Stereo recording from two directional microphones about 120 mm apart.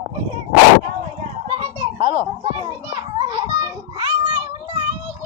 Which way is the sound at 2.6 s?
35° right (ahead or behind).